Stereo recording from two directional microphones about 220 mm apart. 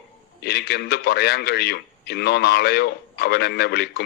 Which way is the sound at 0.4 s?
45° left (ahead or behind).